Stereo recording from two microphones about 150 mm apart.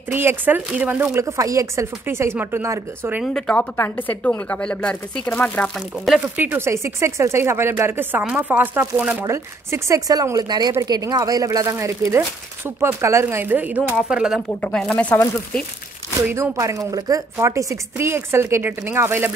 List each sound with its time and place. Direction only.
0.1 s speech: 15° right (ahead or behind)
3.3 s speech: 5° left (ahead or behind)
6.3 s speech: 10° right (ahead or behind)
14.6 s speech: 5° left (ahead or behind)
16.3 s speech: 20° right (ahead or behind)